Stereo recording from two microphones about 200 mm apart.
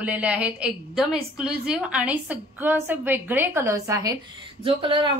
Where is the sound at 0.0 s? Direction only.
5° right (ahead or behind).